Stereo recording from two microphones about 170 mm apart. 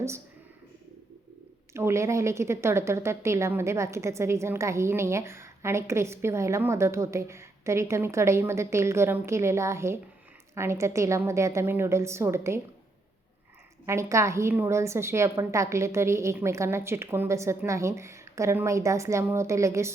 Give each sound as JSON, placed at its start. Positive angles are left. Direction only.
{"t": 1.7, "sound": "a woman's voice", "side_deg": -15}
{"t": 13.8, "sound": "a woman's voice", "side_deg": -15}